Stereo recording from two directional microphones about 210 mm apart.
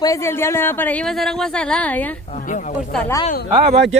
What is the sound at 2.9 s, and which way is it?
Speech, 10° left (ahead or behind).